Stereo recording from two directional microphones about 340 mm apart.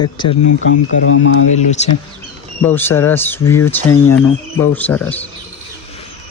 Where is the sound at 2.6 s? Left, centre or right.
Centre.